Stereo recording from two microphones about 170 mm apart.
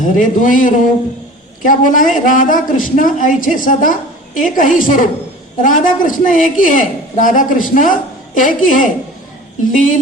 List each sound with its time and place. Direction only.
0.0 s a man's voice: 50° left (ahead or behind)